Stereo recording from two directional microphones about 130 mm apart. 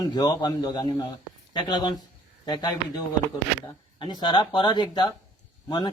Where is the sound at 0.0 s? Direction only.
30° left (ahead or behind).